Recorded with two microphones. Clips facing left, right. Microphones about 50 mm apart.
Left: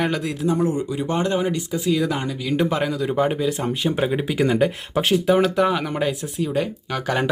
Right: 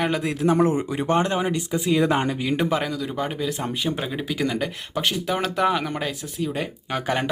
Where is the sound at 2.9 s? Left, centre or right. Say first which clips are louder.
Left 6 dB; centre.